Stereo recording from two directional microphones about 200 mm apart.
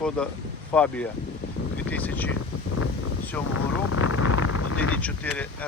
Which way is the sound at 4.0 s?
90° left.